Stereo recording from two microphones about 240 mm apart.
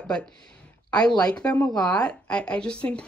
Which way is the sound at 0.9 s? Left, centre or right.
Centre.